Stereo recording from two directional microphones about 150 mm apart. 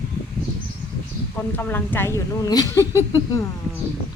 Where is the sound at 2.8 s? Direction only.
15° right (ahead or behind).